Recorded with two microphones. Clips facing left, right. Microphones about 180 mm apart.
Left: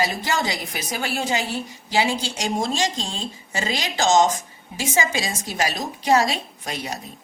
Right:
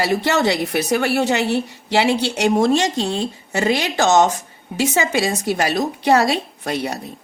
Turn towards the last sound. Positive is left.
turn(degrees=-65)  # may be behind; listen again after turning